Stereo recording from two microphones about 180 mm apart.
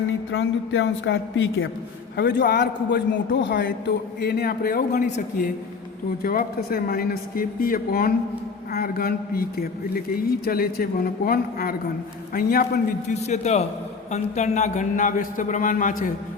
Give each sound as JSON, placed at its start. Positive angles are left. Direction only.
{"t": 0.3, "sound": "a woman's voice", "side_deg": 90}
{"t": 2.1, "sound": "a man's voice", "side_deg": 65}
{"t": 6.2, "sound": "a man's voice", "side_deg": 55}
{"t": 13.1, "sound": "a man's voice", "side_deg": 40}